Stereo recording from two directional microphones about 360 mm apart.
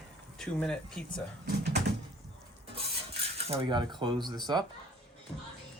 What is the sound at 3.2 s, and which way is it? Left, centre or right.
Speech, centre.